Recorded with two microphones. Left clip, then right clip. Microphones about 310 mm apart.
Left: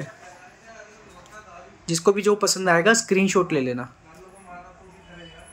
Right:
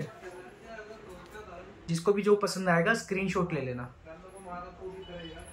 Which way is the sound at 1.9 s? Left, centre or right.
Left.